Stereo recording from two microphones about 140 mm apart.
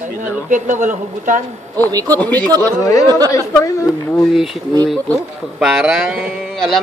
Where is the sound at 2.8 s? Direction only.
25° left (ahead or behind).